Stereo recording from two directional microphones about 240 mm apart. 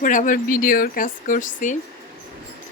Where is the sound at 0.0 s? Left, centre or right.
Left.